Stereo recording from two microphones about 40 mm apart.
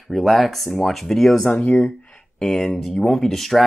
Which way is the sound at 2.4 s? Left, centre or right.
Centre.